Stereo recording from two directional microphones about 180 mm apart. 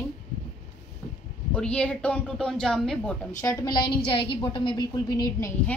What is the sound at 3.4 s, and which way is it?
A woman's voice, 20° left (ahead or behind).